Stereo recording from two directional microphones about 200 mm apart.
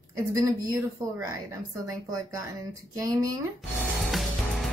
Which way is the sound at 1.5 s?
15° right (ahead or behind).